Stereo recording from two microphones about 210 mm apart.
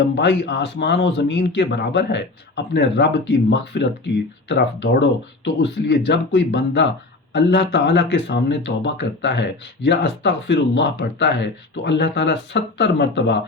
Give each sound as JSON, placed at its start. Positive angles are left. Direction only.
{"t": 0.2, "sound": "speech", "side_deg": 55}
{"t": 6.1, "sound": "speech", "side_deg": 55}